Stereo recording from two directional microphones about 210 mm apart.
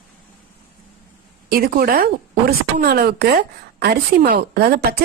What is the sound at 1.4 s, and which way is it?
Speech, 45° right (ahead or behind).